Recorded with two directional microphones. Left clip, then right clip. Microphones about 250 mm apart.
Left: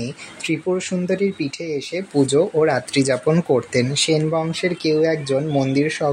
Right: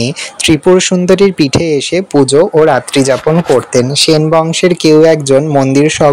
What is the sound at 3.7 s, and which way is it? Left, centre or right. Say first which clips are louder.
Speech: right 10 dB; right.